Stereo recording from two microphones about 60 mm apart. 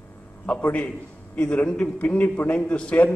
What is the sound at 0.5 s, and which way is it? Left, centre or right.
A man's voice, left.